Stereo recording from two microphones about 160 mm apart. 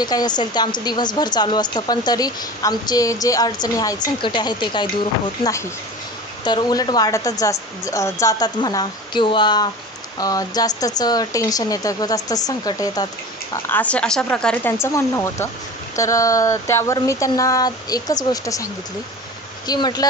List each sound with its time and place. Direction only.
0.0 s a woman's voice: 25° left (ahead or behind)
6.4 s a woman's voice: 25° left (ahead or behind)
13.7 s a woman's voice: 10° left (ahead or behind)
19.7 s a woman's voice: 25° left (ahead or behind)